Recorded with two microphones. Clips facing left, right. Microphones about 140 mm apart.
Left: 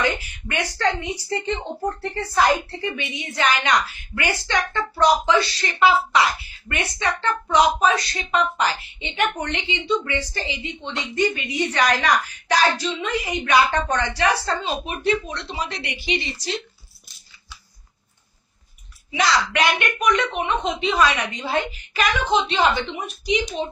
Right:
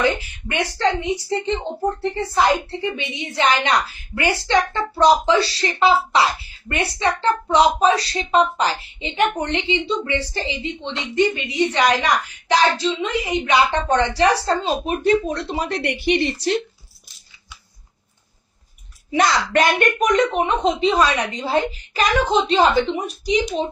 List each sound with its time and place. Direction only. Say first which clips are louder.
0.0 s speech: right 4 dB; 25° right (ahead or behind); by 16.6 s 55° right (ahead or behind)
19.0 s speech: right 2 dB; 45° right (ahead or behind)